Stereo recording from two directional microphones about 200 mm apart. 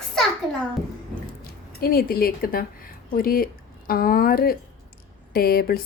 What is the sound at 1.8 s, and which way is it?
A woman's voice, 50° left (ahead or behind).